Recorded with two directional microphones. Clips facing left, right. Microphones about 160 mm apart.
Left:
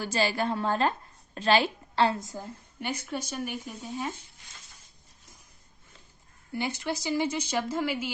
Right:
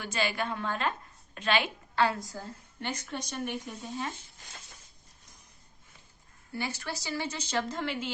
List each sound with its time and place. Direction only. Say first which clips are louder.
0.0 s a woman's voice: left 4 dB; 35° left (ahead or behind); by 4.1 s 5° left (ahead or behind)
6.6 s speech: left 5 dB; 20° left (ahead or behind)